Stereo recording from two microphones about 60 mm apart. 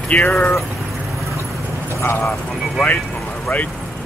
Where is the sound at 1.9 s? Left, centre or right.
Left.